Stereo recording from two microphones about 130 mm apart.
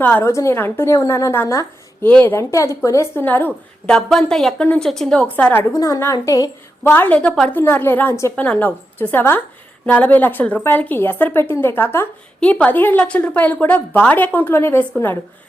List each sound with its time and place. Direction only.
0.0 s a woman's voice: 15° left (ahead or behind)
3.8 s a woman's voice: 5° left (ahead or behind)
5.7 s a woman's voice: 25° left (ahead or behind)
6.9 s a woman's voice: 10° left (ahead or behind)